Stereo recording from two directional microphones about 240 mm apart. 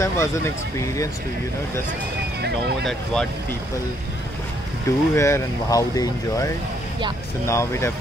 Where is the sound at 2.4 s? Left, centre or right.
Right.